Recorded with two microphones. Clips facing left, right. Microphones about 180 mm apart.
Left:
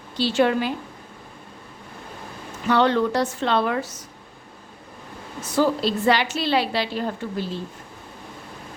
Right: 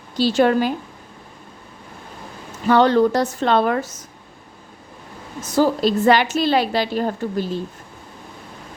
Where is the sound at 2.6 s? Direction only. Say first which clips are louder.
Right 5 dB; 40° right (ahead or behind).